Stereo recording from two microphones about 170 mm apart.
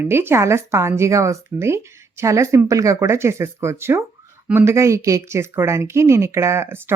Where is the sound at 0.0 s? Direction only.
15° right (ahead or behind).